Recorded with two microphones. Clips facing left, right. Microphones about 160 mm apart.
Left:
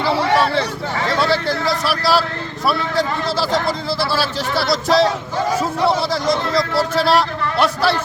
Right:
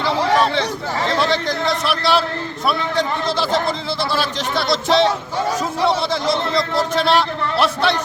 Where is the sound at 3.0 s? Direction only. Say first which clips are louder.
Even; 5° left (ahead or behind).